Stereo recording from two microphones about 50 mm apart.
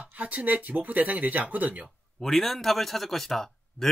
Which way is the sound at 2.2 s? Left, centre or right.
Centre.